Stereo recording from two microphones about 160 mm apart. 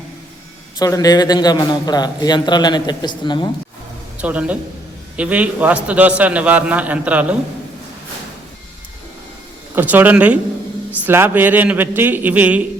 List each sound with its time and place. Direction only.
0.8 s a man's voice: 25° left (ahead or behind)
4.2 s a man's voice: 10° right (ahead or behind)
9.7 s a man's voice: 10° right (ahead or behind)